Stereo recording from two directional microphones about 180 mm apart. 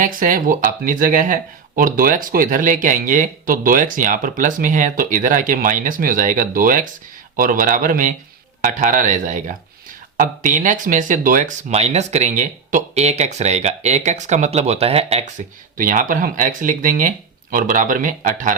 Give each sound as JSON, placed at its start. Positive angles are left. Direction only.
{"t": 0.0, "sound": "speech", "side_deg": -50}
{"t": 15.8, "sound": "speech", "side_deg": -50}